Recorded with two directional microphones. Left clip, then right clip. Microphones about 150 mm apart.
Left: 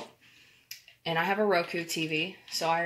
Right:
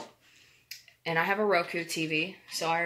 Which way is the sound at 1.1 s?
55° left (ahead or behind).